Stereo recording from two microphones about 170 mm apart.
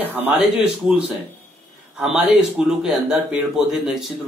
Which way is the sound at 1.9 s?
5° right (ahead or behind).